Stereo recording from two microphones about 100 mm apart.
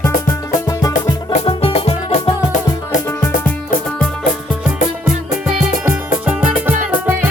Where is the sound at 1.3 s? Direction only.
70° left (ahead or behind); by 2.3 s 90° left.